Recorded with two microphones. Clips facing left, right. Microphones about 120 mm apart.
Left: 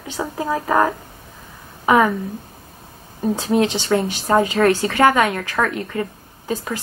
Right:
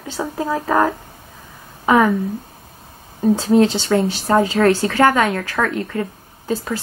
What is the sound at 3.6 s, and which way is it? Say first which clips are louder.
Speech: right 3 dB; 15° left (ahead or behind).